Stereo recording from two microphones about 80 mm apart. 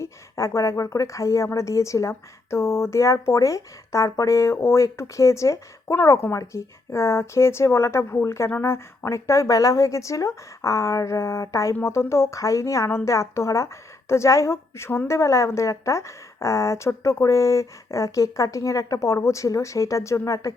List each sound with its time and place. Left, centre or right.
0.0 s a woman's voice: left